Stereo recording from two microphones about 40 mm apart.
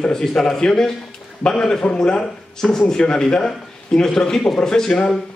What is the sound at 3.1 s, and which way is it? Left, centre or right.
A man's voice, left.